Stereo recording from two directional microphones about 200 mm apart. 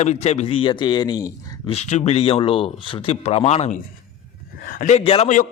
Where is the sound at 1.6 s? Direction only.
35° left (ahead or behind).